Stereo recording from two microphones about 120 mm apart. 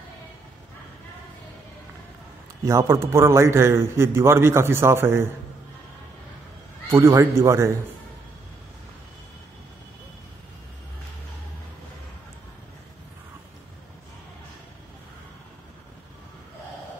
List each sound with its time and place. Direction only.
2.6 s a man's voice: 25° right (ahead or behind)
6.9 s a man's voice: 20° right (ahead or behind)